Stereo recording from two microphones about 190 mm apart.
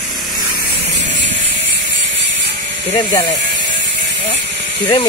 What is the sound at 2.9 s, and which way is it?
Speech, 20° left (ahead or behind).